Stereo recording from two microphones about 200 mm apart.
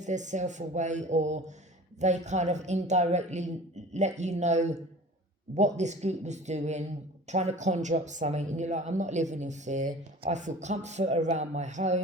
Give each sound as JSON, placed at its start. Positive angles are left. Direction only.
{"t": 0.0, "sound": "speech", "side_deg": -35}